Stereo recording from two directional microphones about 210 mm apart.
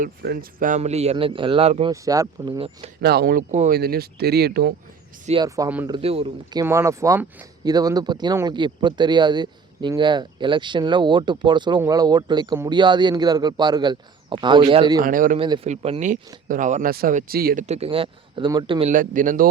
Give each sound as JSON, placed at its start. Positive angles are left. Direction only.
{"t": 0.0, "sound": "speech", "side_deg": -45}
{"t": 1.9, "sound": "speech", "side_deg": -15}
{"t": 3.0, "sound": "speech", "side_deg": -50}
{"t": 5.4, "sound": "speech", "side_deg": -15}
{"t": 5.9, "sound": "speech", "side_deg": -25}
{"t": 15.0, "sound": "speech", "side_deg": -40}
{"t": 15.4, "sound": "speech", "side_deg": -25}
{"t": 18.9, "sound": "speech", "side_deg": -40}